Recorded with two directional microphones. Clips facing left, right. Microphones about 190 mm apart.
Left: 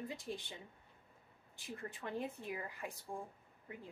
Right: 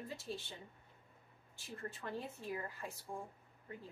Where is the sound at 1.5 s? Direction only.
15° left (ahead or behind).